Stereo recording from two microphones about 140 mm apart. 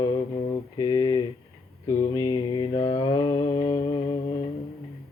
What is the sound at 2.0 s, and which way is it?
Mantra, 30° left (ahead or behind).